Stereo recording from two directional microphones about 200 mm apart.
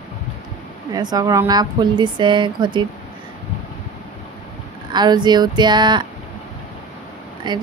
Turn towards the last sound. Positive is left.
turn(degrees=-20)  # may be behind; listen again after turning